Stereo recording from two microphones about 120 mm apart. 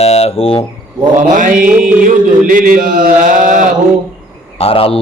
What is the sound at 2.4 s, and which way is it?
Mantra, 90° right.